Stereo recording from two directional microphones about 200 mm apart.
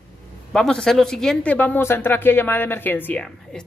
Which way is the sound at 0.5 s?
5° left (ahead or behind).